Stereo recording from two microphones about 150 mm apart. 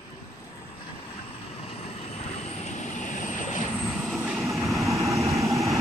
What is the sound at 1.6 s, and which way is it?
Vehicle, 40° left (ahead or behind).